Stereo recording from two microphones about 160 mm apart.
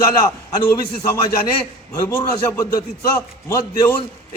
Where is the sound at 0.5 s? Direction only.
15° left (ahead or behind).